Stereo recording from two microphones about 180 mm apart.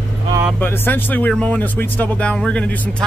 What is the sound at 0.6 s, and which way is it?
Speech, 10° left (ahead or behind).